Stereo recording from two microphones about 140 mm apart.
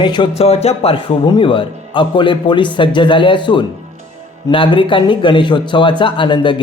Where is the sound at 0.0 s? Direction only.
35° left (ahead or behind).